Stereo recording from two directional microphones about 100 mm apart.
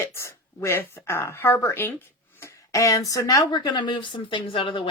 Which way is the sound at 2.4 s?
35° left (ahead or behind).